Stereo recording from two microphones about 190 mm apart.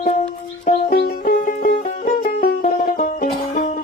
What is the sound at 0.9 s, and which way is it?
Music, 55° left (ahead or behind).